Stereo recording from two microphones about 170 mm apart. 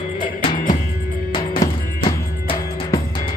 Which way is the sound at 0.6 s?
55° left (ahead or behind).